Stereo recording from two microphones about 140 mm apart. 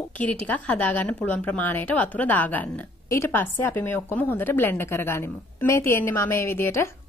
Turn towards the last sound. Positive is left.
turn(degrees=20)  # may be behind; listen again after turning